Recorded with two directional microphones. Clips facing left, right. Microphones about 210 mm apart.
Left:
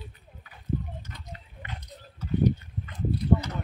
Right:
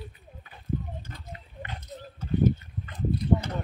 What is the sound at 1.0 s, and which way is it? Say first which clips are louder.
Horse: right 1 dB; 30° right (ahead or behind).